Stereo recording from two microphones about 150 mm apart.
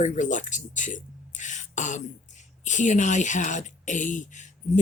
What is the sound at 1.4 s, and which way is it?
Beatboxing, 55° left (ahead or behind).